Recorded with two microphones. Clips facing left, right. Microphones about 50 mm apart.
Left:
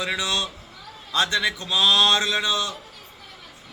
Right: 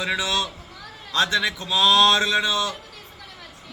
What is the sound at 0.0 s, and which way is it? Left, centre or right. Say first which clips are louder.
A man's voice: right 1 dB; centre.